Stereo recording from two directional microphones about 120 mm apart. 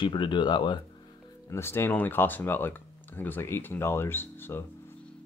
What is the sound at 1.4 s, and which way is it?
Speech, 20° left (ahead or behind).